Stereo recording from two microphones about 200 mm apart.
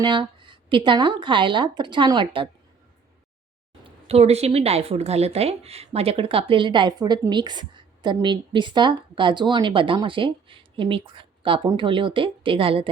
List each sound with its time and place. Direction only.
0.0 s a woman's voice: 25° right (ahead or behind)
3.8 s a woman's voice: 30° right (ahead or behind)